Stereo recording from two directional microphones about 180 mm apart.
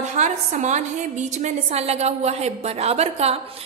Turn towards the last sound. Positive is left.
turn(degrees=-35)  # may be behind; listen again after turning